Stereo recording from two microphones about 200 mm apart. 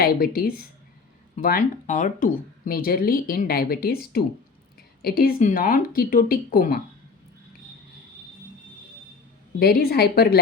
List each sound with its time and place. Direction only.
0.0 s speech: 45° left (ahead or behind)
5.0 s speech: 45° left (ahead or behind)
9.6 s speech: 50° left (ahead or behind)